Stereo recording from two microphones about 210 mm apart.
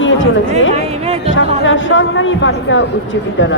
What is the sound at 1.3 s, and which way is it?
Speech, 65° left (ahead or behind).